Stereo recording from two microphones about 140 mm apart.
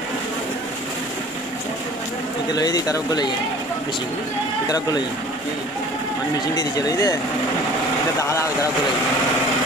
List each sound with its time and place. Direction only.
2.5 s speech: 25° left (ahead or behind)
6.5 s speech: 25° left (ahead or behind)
8.2 s speech: 20° left (ahead or behind)